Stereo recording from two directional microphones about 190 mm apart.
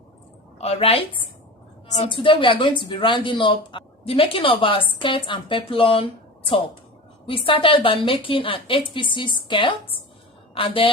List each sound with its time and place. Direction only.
0.6 s a woman's voice: 30° left (ahead or behind)